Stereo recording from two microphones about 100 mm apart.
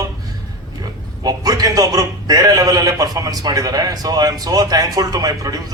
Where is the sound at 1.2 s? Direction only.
40° right (ahead or behind).